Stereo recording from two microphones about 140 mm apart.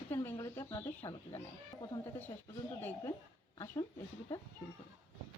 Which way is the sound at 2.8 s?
15° left (ahead or behind).